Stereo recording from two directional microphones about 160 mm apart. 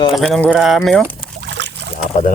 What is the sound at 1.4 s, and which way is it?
Boat, 90° right.